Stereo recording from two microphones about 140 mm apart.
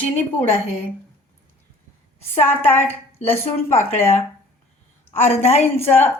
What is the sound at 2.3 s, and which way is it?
Speech, 15° left (ahead or behind).